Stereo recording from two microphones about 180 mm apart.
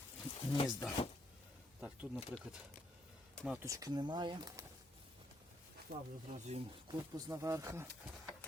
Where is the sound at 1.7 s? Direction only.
5° right (ahead or behind).